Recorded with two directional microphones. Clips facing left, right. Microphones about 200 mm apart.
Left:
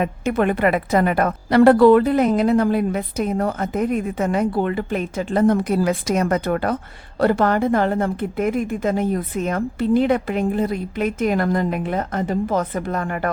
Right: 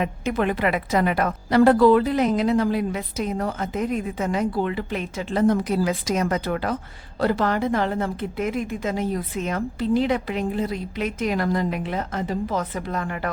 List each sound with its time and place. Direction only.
0.0 s a woman's voice: 50° left (ahead or behind)